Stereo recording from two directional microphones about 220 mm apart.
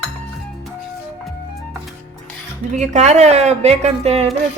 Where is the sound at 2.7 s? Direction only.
30° right (ahead or behind).